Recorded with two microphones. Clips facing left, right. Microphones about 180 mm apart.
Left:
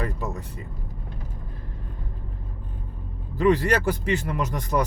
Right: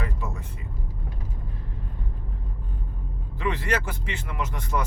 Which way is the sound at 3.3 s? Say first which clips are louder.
Left 7 dB; 40° left (ahead or behind).